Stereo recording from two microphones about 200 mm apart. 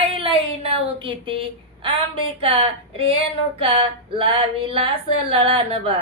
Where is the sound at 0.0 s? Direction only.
25° right (ahead or behind).